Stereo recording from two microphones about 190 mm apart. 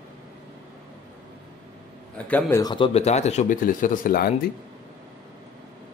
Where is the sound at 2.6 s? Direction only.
25° left (ahead or behind); by 4.3 s 50° left (ahead or behind).